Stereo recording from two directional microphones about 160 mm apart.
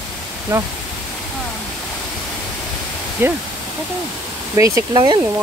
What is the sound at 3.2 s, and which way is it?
Speech, 15° right (ahead or behind).